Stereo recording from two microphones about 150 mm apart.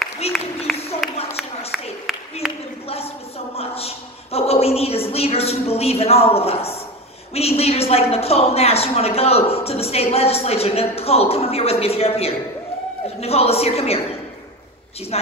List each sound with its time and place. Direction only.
0.2 s applause: 45° left (ahead or behind)
1.0 s speech: centre (ahead or behind)
3.5 s a woman's voice: 40° left (ahead or behind)